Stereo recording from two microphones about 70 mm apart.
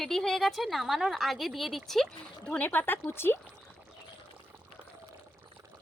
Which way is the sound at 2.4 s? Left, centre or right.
Left.